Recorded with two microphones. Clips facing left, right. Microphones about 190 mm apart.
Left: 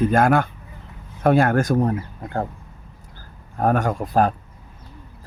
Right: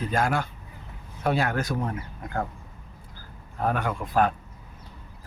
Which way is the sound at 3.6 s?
45° left (ahead or behind).